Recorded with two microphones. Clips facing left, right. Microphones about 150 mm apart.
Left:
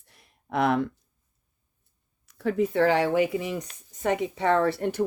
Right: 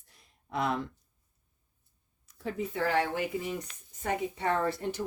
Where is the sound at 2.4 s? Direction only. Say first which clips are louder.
Left 9 dB; 75° left (ahead or behind); by 5.1 s 60° left (ahead or behind).